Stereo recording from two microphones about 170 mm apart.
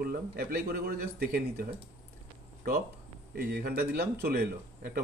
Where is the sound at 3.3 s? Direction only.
65° right (ahead or behind).